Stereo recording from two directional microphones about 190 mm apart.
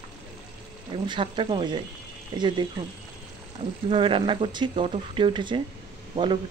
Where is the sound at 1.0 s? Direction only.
25° right (ahead or behind).